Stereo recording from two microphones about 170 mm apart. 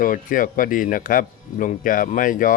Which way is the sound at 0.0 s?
50° left (ahead or behind).